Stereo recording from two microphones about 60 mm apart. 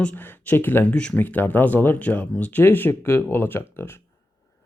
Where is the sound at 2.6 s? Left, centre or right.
Left.